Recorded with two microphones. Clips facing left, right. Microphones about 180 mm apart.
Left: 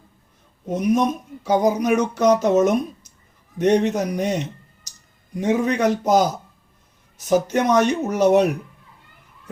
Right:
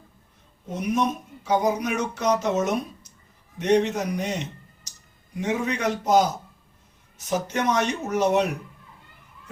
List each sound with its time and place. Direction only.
0.8 s speech: 40° left (ahead or behind)
7.3 s speech: 45° left (ahead or behind)